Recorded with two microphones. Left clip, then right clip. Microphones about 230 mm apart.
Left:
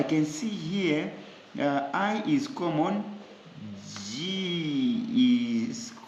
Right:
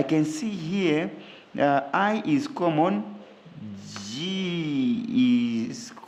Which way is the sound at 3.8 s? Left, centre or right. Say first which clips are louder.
Right 2 dB; right.